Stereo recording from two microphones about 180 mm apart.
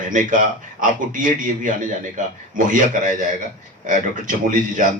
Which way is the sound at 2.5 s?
45° right (ahead or behind).